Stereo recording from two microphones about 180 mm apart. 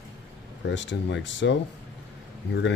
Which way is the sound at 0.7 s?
85° left.